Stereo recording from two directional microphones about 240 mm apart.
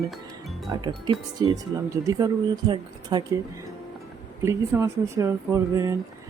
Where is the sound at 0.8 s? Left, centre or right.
Centre.